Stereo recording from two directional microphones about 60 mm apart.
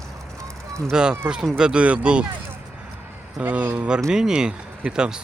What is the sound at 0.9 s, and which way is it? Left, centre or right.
Speech, centre.